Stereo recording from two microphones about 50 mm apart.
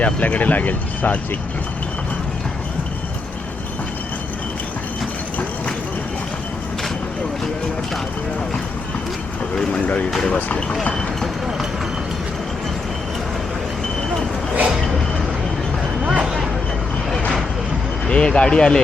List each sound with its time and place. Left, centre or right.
0.0 s speech: left
10.2 s speech: left
16.2 s vehicle: centre
18.1 s speech: centre